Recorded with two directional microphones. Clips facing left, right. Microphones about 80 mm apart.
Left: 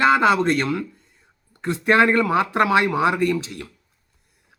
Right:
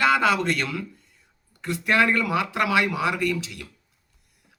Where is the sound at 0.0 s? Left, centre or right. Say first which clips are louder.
Left 4 dB; left.